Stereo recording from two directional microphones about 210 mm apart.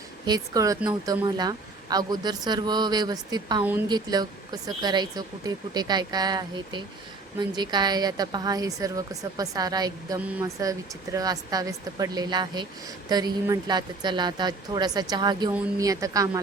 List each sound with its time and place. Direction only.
0.3 s speech: 20° right (ahead or behind)